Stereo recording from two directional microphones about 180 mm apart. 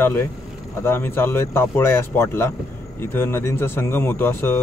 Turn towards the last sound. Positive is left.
turn(degrees=10)  # may be behind; listen again after turning